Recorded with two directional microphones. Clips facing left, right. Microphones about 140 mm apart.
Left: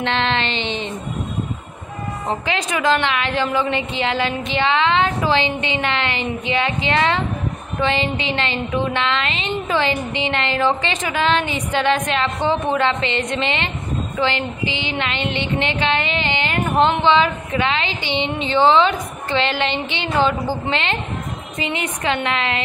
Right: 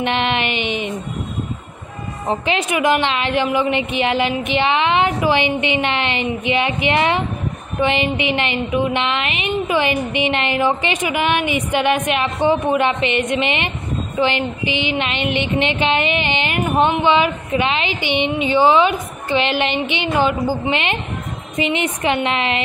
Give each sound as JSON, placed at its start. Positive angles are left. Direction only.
{"t": 0.0, "sound": "a woman's voice", "side_deg": -15}
{"t": 2.2, "sound": "a woman's voice", "side_deg": -20}